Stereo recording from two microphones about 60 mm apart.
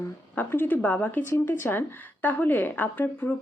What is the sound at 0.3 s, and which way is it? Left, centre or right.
Speech, left.